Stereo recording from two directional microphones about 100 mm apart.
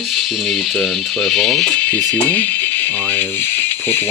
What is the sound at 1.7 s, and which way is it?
Speech, 15° left (ahead or behind).